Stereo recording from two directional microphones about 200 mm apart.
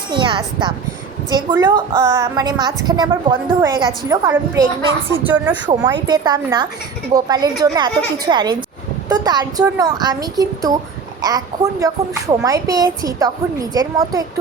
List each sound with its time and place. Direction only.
0.1 s a woman's voice: 25° right (ahead or behind); by 5.5 s 10° right (ahead or behind)
5.6 s a woman's voice: 20° right (ahead or behind)